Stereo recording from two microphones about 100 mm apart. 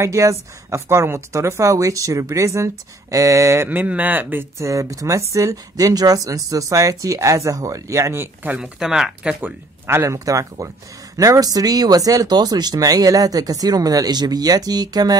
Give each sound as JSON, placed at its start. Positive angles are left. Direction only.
{"t": 0.0, "sound": "a woman's voice", "side_deg": -30}
{"t": 4.6, "sound": "speech", "side_deg": -30}
{"t": 8.5, "sound": "speech", "side_deg": -5}
{"t": 9.8, "sound": "speech", "side_deg": -25}